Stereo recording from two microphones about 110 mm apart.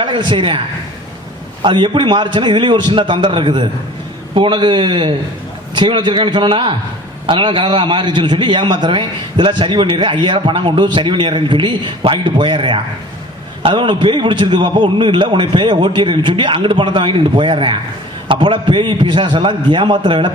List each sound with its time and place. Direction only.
0.0 s a man's voice: 45° right (ahead or behind)
1.6 s a man's voice: 45° right (ahead or behind)